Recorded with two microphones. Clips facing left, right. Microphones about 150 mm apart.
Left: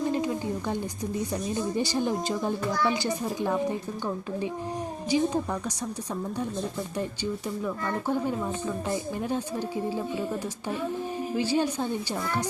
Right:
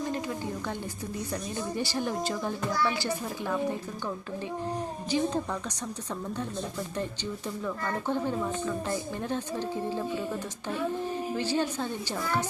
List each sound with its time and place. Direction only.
0.1 s a sound: 15° left (ahead or behind)
1.3 s speech: 20° left (ahead or behind)
5.1 s speech: 10° left (ahead or behind)
7.6 s speech: 10° left (ahead or behind)
11.3 s speech: 15° left (ahead or behind)